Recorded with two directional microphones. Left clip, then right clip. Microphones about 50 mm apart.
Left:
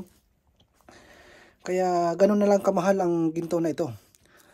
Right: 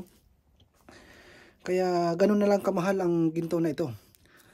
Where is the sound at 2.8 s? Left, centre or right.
Centre.